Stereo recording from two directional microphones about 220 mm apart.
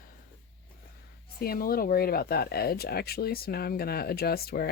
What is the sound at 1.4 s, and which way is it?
Speech, 40° left (ahead or behind).